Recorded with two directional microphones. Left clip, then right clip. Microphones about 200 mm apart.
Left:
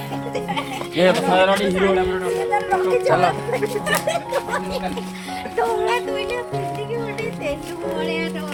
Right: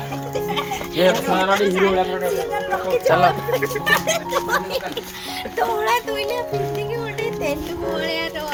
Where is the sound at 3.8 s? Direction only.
40° right (ahead or behind).